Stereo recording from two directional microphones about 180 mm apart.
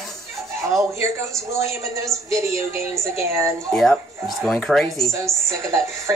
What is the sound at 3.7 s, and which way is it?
Speech, centre (ahead or behind).